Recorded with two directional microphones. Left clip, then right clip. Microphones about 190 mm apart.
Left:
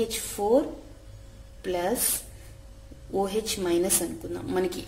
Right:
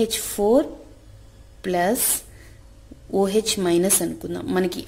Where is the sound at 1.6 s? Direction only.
45° right (ahead or behind).